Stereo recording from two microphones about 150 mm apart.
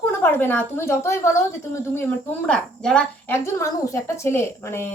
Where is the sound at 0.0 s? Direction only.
15° left (ahead or behind).